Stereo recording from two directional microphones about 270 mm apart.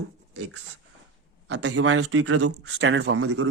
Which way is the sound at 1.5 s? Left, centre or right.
Right.